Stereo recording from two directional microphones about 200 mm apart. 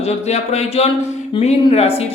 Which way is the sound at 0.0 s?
30° left (ahead or behind).